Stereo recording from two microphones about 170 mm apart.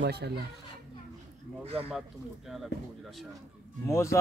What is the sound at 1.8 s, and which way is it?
Speech, 5° right (ahead or behind).